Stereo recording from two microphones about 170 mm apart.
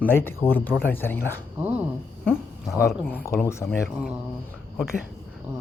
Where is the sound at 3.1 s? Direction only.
15° left (ahead or behind).